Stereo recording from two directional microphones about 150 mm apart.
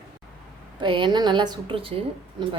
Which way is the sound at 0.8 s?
35° right (ahead or behind).